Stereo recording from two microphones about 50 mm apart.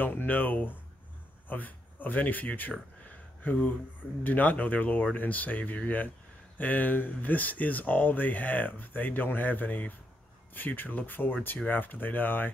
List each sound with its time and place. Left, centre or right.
0.0 s speech: left